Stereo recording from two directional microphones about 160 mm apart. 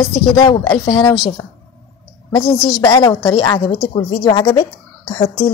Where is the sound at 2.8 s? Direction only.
25° left (ahead or behind).